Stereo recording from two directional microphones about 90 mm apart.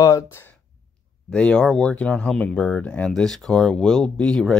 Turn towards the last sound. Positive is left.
turn(degrees=5)  # may be behind; listen again after turning